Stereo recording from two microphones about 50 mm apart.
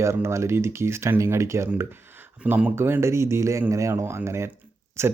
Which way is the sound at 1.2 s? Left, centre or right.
Right.